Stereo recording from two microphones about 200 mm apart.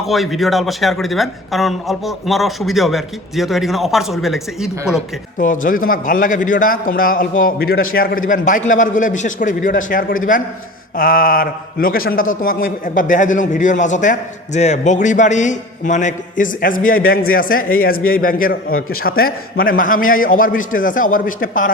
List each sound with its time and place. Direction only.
0.0 s a man's voice: centre (ahead or behind)
4.9 s a man's voice: 40° left (ahead or behind)